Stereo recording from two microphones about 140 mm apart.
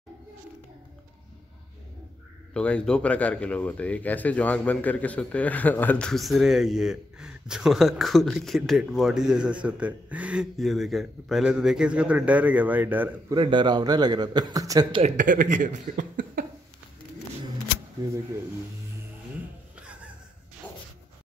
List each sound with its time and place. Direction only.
2.5 s speech: 5° left (ahead or behind); by 13.1 s 15° right (ahead or behind)
13.3 s a man's voice: 35° right (ahead or behind)
14.9 s a man's voice: 40° right (ahead or behind)
15.1 s speech: 70° right (ahead or behind)
20.6 s a sound: 10° left (ahead or behind)